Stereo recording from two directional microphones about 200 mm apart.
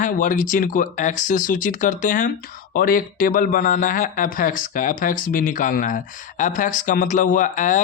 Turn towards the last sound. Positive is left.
turn(degrees=40)  # may be behind; listen again after turning